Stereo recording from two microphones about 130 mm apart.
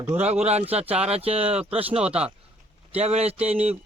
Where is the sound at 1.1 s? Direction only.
50° right (ahead or behind).